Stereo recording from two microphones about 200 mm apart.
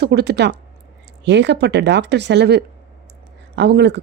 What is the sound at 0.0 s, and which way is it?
Speech, 55° right (ahead or behind).